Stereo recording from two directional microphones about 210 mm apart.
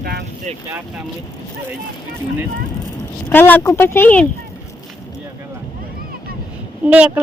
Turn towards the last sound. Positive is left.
turn(degrees=-5)  # may be behind; listen again after turning